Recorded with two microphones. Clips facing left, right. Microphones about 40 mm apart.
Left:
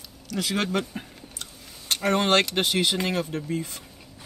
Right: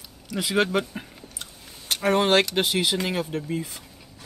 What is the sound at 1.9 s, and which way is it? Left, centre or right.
Speech, centre.